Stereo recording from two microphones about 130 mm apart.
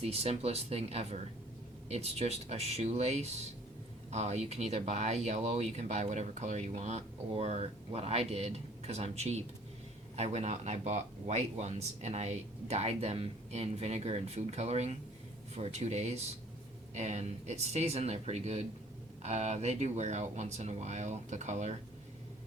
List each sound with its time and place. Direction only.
0.0 s speech: 50° right (ahead or behind)